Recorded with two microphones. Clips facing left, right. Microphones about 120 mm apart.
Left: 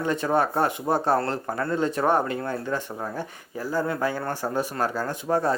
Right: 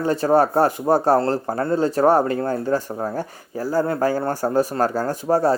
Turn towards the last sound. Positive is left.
turn(degrees=-35)  # may be behind; listen again after turning